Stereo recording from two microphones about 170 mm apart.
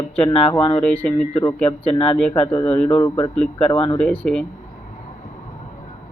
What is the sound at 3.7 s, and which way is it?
Speech, 30° left (ahead or behind).